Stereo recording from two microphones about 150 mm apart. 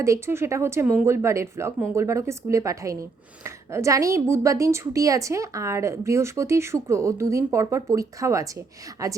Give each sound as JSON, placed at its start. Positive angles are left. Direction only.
{"t": 0.0, "sound": "speech", "side_deg": -20}